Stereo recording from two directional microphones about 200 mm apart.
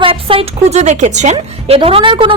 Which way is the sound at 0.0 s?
25° right (ahead or behind).